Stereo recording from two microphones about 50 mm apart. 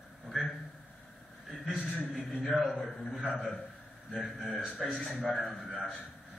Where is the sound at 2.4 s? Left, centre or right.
Centre.